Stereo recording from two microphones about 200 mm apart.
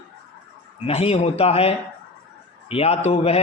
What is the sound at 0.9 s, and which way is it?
A man's voice, 30° left (ahead or behind).